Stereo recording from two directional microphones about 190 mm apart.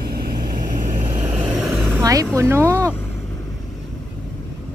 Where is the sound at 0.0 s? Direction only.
55° right (ahead or behind).